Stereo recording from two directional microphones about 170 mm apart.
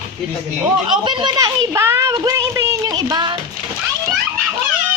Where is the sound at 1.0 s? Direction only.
25° right (ahead or behind).